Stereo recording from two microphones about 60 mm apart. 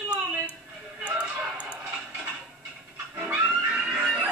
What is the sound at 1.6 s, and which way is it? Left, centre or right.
Music, right.